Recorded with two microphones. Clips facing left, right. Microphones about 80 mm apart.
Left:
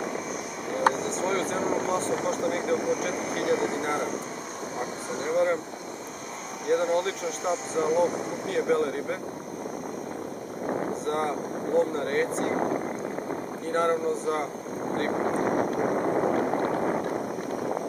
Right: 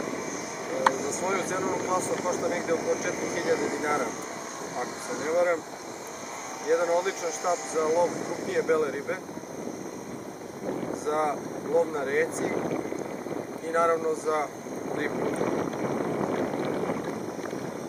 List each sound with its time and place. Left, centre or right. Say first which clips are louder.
0.7 s vehicle: left 1 dB; centre
2.2 s speech: left 1 dB; centre
6.6 s speech: even; centre
11.1 s speech: right 4 dB; centre
13.7 s speech: right 1 dB; centre
15.4 s a sound: left 3 dB; left